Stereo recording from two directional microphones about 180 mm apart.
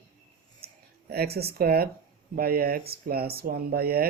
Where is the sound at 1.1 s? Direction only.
60° right (ahead or behind).